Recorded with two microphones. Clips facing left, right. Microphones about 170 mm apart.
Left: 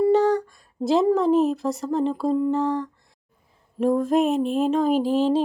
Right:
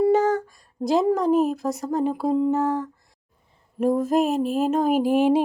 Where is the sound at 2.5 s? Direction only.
5° right (ahead or behind).